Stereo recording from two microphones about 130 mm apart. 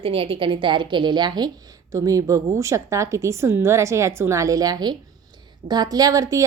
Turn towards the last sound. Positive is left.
turn(degrees=-25)  # may be behind; listen again after turning